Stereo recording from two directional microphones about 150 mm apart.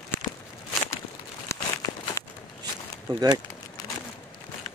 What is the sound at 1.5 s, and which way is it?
Crumpling, 20° left (ahead or behind).